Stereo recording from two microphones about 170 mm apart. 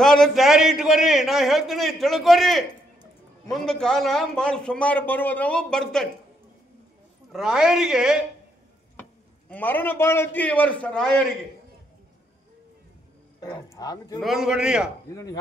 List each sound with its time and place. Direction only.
0.0 s a man's voice: centre (ahead or behind)
7.3 s a man's voice: 5° right (ahead or behind)
9.5 s a man's voice: 10° left (ahead or behind)
13.4 s speech: 20° left (ahead or behind)
14.2 s a man's voice: centre (ahead or behind)